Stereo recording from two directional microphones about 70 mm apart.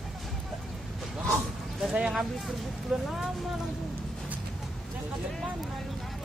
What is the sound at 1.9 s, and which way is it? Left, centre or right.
Speech, centre.